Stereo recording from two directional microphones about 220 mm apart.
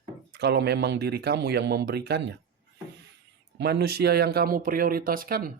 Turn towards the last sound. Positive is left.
turn(degrees=-40)  # may be behind; listen again after turning